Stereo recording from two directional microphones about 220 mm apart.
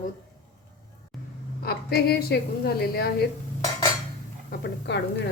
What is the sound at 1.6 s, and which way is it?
A woman's voice, 45° left (ahead or behind).